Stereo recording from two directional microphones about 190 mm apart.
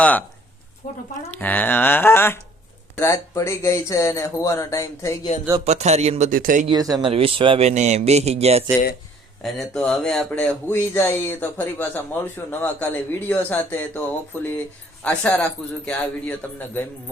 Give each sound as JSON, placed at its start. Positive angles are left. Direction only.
{"t": 0.0, "sound": "speech", "side_deg": 10}
{"t": 0.8, "sound": "speech", "side_deg": 45}
{"t": 1.3, "sound": "speech", "side_deg": 10}
{"t": 5.6, "sound": "speech", "side_deg": -35}
{"t": 6.7, "sound": "speech", "side_deg": -20}
{"t": 9.4, "sound": "speech", "side_deg": 0}
{"t": 15.0, "sound": "speech", "side_deg": 5}